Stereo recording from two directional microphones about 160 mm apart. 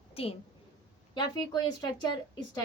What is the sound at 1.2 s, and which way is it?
Speech, 25° left (ahead or behind).